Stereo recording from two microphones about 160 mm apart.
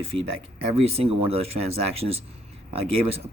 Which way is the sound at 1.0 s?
40° right (ahead or behind).